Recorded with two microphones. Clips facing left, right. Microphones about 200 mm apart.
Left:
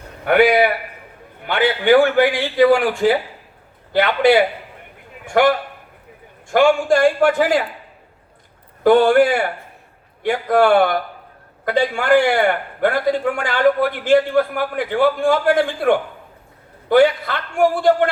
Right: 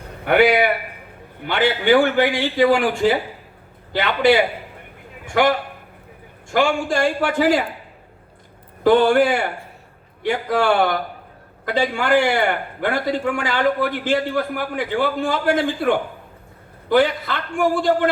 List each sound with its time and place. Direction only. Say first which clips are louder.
0.3 s a man's voice: left 2 dB; 50° left (ahead or behind)
8.8 s a man's voice: left 2 dB; 50° left (ahead or behind)